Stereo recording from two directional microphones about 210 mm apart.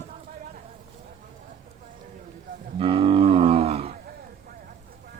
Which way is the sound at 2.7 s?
25° right (ahead or behind).